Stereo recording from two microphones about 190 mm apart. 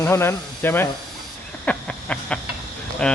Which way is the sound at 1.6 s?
5° left (ahead or behind).